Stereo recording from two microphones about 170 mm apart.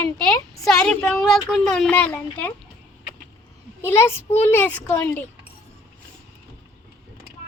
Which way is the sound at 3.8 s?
15° left (ahead or behind).